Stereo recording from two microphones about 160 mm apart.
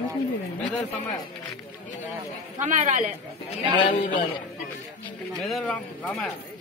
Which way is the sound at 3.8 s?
30° left (ahead or behind).